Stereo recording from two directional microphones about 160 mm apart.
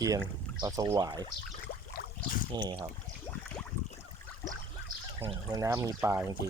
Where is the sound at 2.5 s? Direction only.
25° right (ahead or behind).